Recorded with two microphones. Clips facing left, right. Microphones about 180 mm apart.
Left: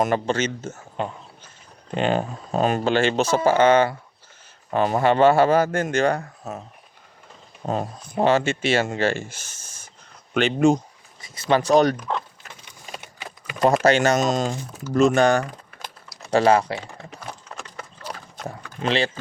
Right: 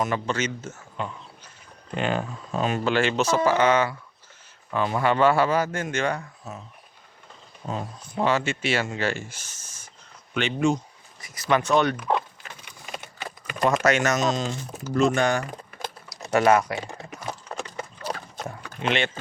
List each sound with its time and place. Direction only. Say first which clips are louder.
0.3 s speech: left 4 dB; 30° left (ahead or behind)
4.7 s speech: left 4 dB; 40° left (ahead or behind)
5.0 s speech: left 4 dB; 25° left (ahead or behind)
5.5 s speech: left 5 dB; 50° left (ahead or behind)
5.9 s speech: left 6 dB; 35° left (ahead or behind)
7.6 s speech: left 6 dB; 35° left (ahead or behind)
10.3 s speech: left 5 dB; 45° left (ahead or behind)
11.2 s speech: left 3 dB; 30° left (ahead or behind)
13.0 s typing: right 2 dB; 15° left (ahead or behind)
13.8 s speech: left 4 dB; 30° left (ahead or behind)
14.2 s speech: left 3 dB; 50° left (ahead or behind)
15.1 s speech: left 5 dB; 35° left (ahead or behind)
18.4 s speech: left 2 dB; 35° left (ahead or behind)